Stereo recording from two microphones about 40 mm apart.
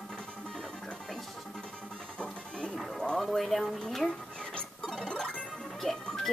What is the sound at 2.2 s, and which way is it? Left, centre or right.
Music, left.